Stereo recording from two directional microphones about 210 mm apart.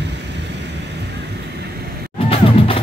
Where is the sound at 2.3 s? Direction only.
25° left (ahead or behind).